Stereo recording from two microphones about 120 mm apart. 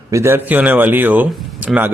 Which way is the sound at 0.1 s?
20° right (ahead or behind).